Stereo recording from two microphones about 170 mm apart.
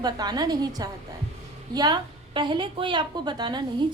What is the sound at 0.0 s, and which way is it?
A woman's voice, 25° right (ahead or behind).